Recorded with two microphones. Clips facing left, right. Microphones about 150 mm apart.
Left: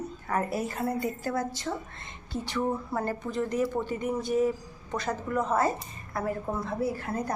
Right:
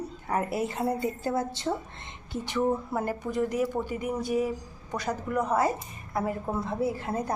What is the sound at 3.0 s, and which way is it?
Speech, 10° right (ahead or behind).